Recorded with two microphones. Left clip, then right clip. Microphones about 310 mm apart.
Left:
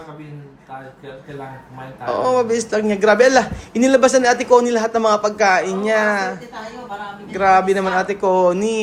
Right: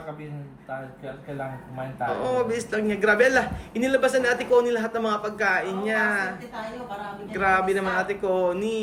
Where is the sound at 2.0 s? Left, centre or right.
Centre.